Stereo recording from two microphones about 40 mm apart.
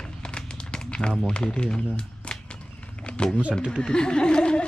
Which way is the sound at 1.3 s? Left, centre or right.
Left.